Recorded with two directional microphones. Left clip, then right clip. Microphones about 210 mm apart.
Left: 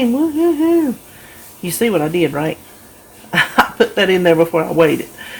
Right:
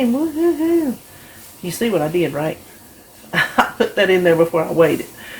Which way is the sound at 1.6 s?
40° left (ahead or behind).